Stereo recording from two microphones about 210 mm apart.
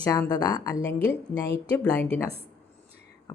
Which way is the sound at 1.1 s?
50° left (ahead or behind).